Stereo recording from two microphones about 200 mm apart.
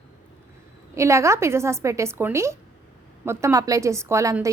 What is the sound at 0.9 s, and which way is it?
A woman's voice, 15° right (ahead or behind).